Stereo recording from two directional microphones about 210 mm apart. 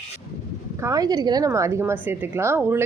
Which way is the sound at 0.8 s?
15° right (ahead or behind).